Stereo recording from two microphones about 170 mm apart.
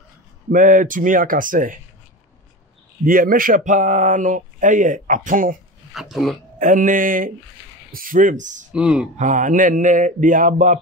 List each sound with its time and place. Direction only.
0.5 s speech: 50° right (ahead or behind)
3.1 s speech: 55° right (ahead or behind)
5.9 s speech: centre (ahead or behind)
6.6 s speech: 50° right (ahead or behind)
8.7 s speech: 5° right (ahead or behind)
9.1 s speech: 45° right (ahead or behind)